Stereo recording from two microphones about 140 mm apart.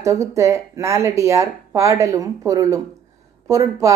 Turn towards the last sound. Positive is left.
turn(degrees=-25)  # may be behind; listen again after turning